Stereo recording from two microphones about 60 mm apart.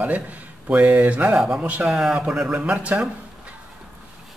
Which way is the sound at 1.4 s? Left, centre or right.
Centre.